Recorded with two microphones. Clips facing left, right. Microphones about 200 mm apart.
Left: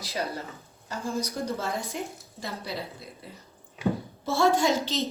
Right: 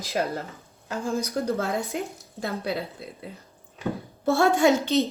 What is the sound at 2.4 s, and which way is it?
Speech, 55° right (ahead or behind).